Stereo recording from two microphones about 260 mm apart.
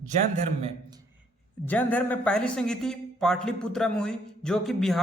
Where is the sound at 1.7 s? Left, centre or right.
Centre.